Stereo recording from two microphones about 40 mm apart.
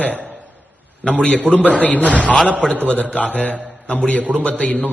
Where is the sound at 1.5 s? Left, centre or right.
Left.